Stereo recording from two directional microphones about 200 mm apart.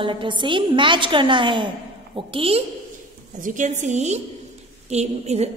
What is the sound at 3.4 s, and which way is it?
A woman's voice, 40° right (ahead or behind).